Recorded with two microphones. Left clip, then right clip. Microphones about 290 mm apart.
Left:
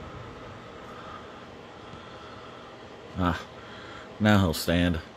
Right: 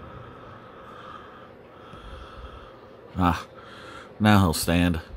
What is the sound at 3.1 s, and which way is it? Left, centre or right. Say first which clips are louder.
Speech: right 5 dB; centre.